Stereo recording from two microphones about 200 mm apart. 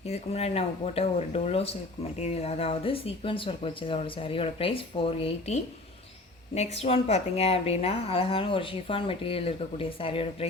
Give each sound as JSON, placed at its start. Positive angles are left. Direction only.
{"t": 0.0, "sound": "a woman's voice", "side_deg": 30}